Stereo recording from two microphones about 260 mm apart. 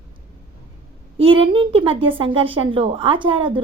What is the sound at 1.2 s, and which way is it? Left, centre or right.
A woman's voice, centre.